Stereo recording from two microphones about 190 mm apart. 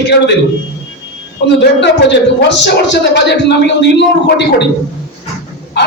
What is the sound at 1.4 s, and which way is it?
A man's voice, 65° left (ahead or behind).